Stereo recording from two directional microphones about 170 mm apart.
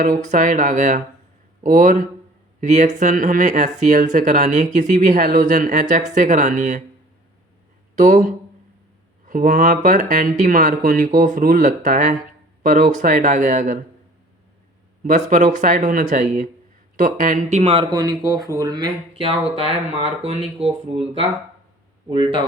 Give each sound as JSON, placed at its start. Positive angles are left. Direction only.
{"t": 0.0, "sound": "speech", "side_deg": -45}
{"t": 7.9, "sound": "speech", "side_deg": -45}
{"t": 15.0, "sound": "speech", "side_deg": -45}